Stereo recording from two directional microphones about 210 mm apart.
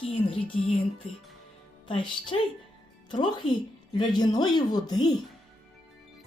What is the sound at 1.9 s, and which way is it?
Speech, 25° left (ahead or behind).